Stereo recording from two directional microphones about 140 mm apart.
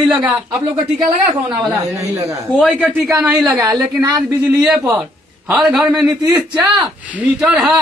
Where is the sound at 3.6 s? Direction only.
30° right (ahead or behind).